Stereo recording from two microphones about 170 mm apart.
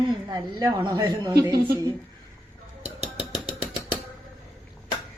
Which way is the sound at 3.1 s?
5° right (ahead or behind).